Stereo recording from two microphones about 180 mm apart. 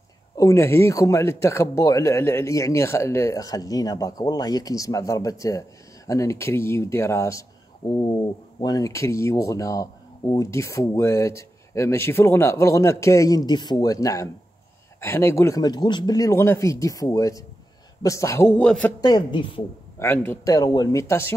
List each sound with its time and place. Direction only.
0.4 s speech: 15° left (ahead or behind)
8.5 s speech: 20° left (ahead or behind)
18.9 s speech: 25° left (ahead or behind)
20.0 s speech: 15° left (ahead or behind)